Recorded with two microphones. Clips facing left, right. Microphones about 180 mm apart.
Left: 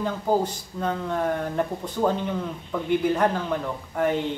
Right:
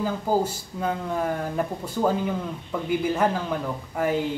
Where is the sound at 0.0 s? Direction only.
5° right (ahead or behind).